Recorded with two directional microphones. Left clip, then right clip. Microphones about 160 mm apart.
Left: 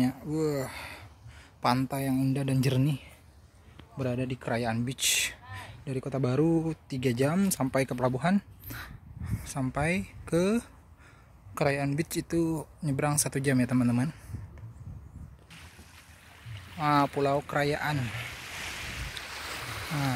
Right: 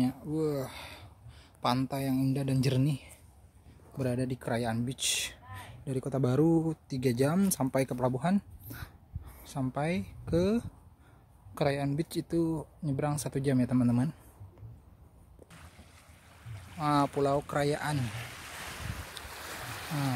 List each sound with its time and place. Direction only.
0.0 s speech: centre (ahead or behind)
4.0 s speech: 20° right (ahead or behind); by 5.7 s 5° right (ahead or behind)
5.9 s speech: 20° right (ahead or behind)
16.7 s speech: 5° right (ahead or behind)
18.4 s ocean: 35° right (ahead or behind)
19.3 s boat: 70° right (ahead or behind)